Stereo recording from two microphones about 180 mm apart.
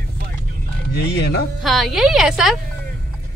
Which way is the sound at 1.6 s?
Centre (ahead or behind).